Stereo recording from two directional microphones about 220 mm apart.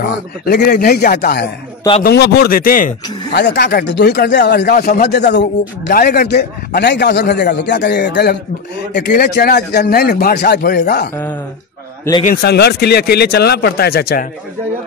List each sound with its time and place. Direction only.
0.0 s speech: 45° left (ahead or behind)
12.2 s speech: 40° left (ahead or behind)